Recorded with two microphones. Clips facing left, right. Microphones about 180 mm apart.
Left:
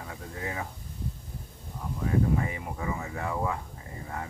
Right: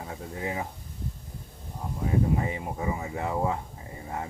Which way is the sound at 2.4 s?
25° right (ahead or behind).